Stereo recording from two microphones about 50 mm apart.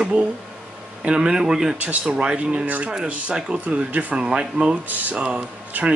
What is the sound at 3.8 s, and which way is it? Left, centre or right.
Speech, right.